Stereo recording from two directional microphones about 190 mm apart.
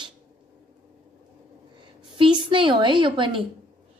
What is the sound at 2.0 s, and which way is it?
A woman's voice, 25° right (ahead or behind).